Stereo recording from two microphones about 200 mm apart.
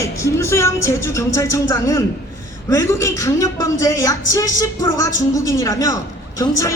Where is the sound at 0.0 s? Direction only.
15° left (ahead or behind).